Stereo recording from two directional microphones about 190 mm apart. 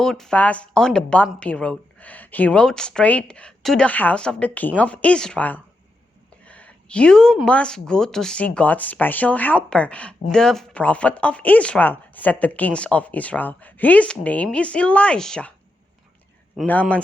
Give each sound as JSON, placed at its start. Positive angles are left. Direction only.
{"t": 0.0, "sound": "speech", "side_deg": 5}
{"t": 16.6, "sound": "speech", "side_deg": 5}